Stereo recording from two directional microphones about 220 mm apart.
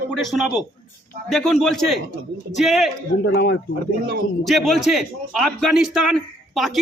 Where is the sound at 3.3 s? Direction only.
50° left (ahead or behind).